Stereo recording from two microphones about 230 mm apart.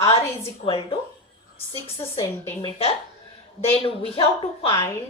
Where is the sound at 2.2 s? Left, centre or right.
Centre.